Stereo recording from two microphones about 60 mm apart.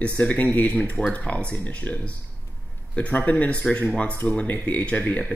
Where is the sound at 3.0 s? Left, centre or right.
Left.